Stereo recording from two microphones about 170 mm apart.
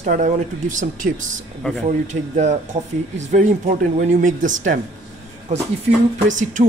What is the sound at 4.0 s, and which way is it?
Speech, 50° right (ahead or behind).